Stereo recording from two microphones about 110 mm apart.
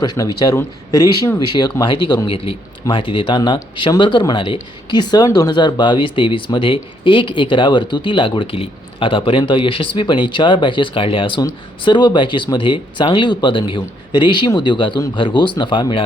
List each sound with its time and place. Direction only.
0.0 s speech: 35° left (ahead or behind)
2.2 s a man's voice: 55° left (ahead or behind)